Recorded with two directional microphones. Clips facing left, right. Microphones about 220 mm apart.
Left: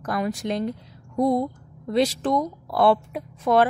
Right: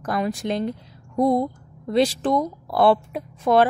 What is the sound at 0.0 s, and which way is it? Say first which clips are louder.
Speech: right 1 dB; 30° right (ahead or behind).